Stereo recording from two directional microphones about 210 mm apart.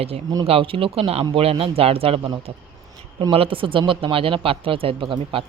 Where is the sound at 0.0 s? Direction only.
25° right (ahead or behind).